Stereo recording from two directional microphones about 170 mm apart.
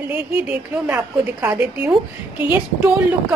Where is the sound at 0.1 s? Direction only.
10° right (ahead or behind).